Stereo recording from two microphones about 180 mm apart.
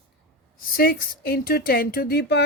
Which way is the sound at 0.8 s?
55° left (ahead or behind).